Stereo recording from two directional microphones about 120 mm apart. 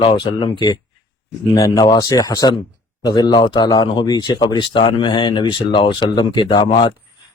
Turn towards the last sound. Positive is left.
turn(degrees=40)  # may be behind; listen again after turning